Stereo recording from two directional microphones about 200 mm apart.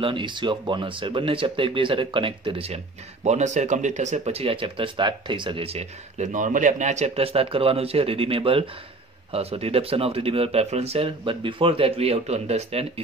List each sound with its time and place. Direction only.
0.0 s speech: 25° right (ahead or behind)